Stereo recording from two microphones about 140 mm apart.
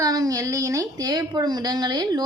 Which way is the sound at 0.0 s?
25° right (ahead or behind).